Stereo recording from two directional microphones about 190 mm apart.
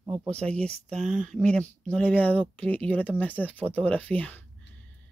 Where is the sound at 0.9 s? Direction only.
40° right (ahead or behind).